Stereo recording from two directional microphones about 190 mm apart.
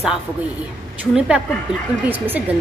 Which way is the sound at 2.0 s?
10° right (ahead or behind).